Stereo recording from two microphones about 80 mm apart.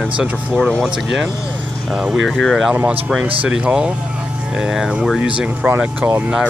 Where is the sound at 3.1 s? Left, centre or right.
Centre.